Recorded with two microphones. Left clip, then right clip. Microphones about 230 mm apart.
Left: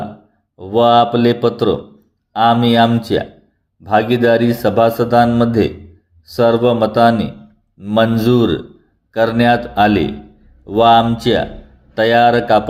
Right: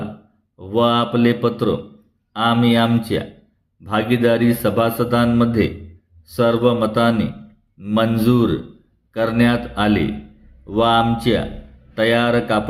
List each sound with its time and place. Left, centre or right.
0.6 s speech: centre